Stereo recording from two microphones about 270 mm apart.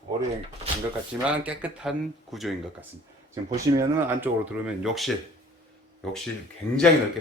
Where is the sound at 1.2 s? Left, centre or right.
Centre.